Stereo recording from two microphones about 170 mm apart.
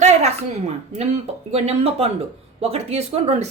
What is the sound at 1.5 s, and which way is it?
A woman's voice, 40° right (ahead or behind).